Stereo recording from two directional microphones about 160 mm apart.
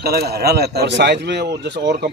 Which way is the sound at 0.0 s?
75° right (ahead or behind).